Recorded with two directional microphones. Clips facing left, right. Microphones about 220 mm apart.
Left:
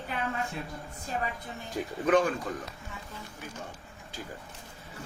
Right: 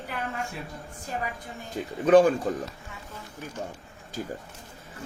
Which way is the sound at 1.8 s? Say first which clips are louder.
Right 7 dB; 30° right (ahead or behind).